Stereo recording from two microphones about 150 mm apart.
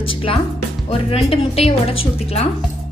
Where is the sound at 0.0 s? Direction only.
40° left (ahead or behind).